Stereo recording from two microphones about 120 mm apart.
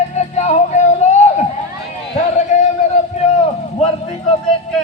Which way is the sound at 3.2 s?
80° left.